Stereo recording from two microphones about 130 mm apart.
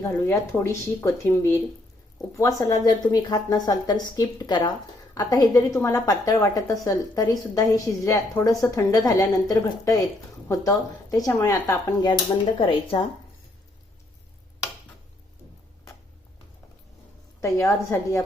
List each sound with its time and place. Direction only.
0.0 s a woman's voice: 20° left (ahead or behind)
12.5 s speech: 45° left (ahead or behind)
17.4 s a woman's voice: 25° left (ahead or behind)